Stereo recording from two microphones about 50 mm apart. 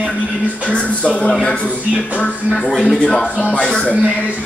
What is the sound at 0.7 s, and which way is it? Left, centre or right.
Speech, left.